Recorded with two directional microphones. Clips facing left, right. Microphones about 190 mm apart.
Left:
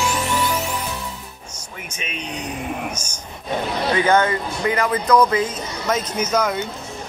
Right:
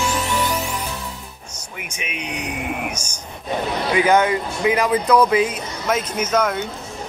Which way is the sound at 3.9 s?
10° right (ahead or behind).